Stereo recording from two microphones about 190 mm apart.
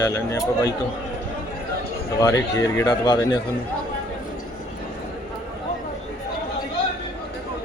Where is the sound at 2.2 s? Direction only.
20° left (ahead or behind).